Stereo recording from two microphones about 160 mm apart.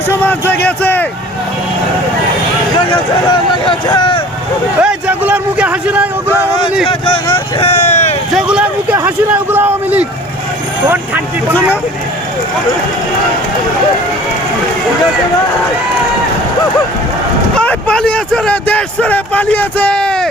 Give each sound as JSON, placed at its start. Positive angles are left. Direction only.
{"t": 0.1, "sound": "speech", "side_deg": 10}
{"t": 2.9, "sound": "speech", "side_deg": 30}
{"t": 4.8, "sound": "a sound", "side_deg": -5}
{"t": 6.8, "sound": "vehicle", "side_deg": 30}
{"t": 8.4, "sound": "a sound", "side_deg": -5}
{"t": 10.8, "sound": "speech", "side_deg": -10}
{"t": 17.6, "sound": "speech", "side_deg": 5}